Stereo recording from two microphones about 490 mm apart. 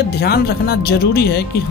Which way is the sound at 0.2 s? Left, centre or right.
Centre.